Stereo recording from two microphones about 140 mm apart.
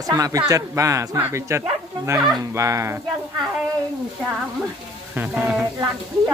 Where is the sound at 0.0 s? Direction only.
25° right (ahead or behind).